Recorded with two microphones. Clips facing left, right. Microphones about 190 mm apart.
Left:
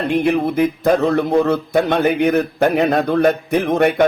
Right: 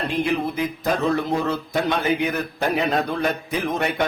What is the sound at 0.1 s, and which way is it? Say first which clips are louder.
A man's voice: left 8 dB; 60° left (ahead or behind).